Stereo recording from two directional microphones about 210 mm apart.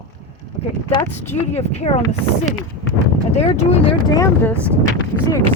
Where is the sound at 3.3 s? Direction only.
30° left (ahead or behind).